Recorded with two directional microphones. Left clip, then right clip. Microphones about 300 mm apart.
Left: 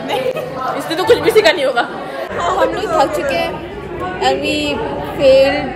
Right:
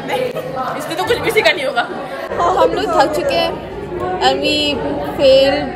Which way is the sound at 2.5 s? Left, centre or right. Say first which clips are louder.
Right 1 dB; centre.